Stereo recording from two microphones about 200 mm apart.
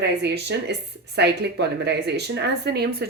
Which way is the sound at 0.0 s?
55° right (ahead or behind).